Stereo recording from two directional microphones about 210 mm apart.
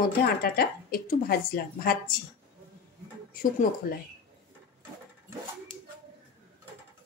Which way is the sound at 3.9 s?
45° left (ahead or behind).